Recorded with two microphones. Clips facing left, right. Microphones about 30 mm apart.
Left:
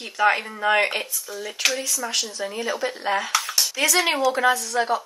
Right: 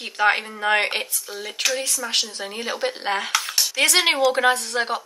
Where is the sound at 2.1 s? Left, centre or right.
Right.